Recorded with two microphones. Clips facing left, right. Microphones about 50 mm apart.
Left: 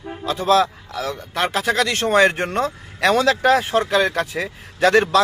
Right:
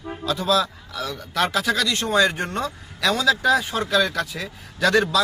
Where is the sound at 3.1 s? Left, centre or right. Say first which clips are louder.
Left 3 dB; left.